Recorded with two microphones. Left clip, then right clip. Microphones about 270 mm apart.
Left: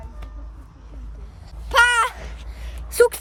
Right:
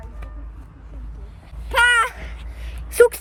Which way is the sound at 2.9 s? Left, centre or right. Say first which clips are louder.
Right 2 dB; centre.